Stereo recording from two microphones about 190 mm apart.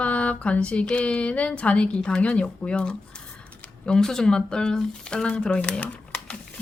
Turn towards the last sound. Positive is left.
turn(degrees=5)  # may be behind; listen again after turning